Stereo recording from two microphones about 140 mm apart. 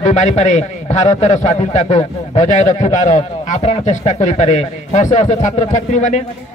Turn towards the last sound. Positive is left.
turn(degrees=60)  # may be behind; listen again after turning